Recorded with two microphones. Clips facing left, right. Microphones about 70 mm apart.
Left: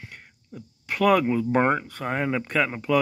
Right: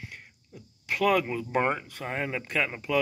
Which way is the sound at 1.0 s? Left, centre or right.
Left.